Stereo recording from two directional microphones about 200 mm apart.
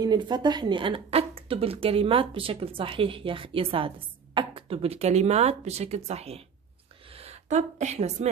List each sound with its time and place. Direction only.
0.0 s a woman's voice: 20° right (ahead or behind)